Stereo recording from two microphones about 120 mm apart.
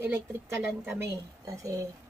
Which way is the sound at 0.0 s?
20° right (ahead or behind).